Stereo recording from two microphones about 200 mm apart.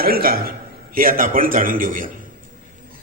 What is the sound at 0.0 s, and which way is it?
A man's voice, 45° right (ahead or behind).